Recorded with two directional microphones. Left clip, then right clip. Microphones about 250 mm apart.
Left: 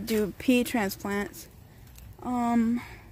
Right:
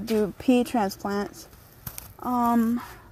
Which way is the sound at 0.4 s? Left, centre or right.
Centre.